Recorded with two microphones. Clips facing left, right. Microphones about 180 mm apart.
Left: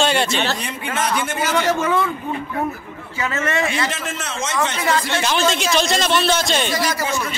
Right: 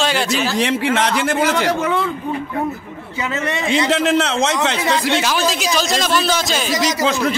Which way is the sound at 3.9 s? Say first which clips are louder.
Right 12 dB; 75° right (ahead or behind).